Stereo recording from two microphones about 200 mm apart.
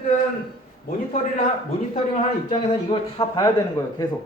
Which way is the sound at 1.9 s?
35° left (ahead or behind).